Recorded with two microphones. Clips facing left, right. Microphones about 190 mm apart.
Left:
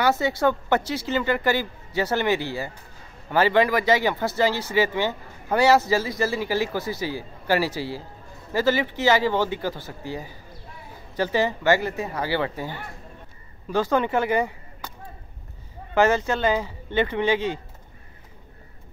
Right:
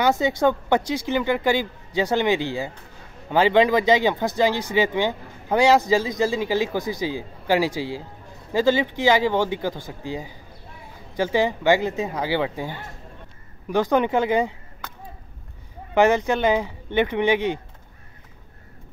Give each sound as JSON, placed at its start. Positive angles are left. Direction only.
{"t": 0.0, "sound": "speech", "side_deg": -15}
{"t": 15.9, "sound": "speech", "side_deg": -15}